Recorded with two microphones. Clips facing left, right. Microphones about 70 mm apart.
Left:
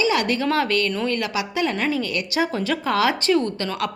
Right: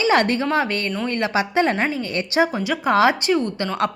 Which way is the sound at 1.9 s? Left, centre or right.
Right.